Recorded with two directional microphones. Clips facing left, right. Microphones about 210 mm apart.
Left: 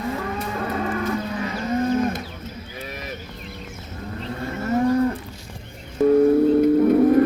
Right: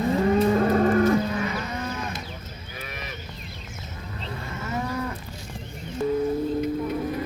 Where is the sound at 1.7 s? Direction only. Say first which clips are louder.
Left 11 dB; 45° left (ahead or behind).